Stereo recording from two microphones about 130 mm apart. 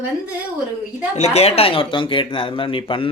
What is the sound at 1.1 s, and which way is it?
Speech, 55° left (ahead or behind).